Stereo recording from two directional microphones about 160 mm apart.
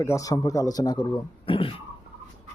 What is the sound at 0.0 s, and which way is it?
A man's voice, 20° left (ahead or behind).